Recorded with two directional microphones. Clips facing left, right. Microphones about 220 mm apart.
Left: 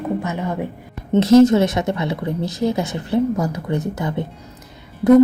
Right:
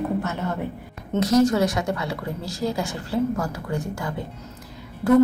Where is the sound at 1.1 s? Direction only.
25° left (ahead or behind).